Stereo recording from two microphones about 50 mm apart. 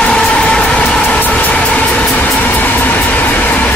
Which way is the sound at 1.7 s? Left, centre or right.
Left.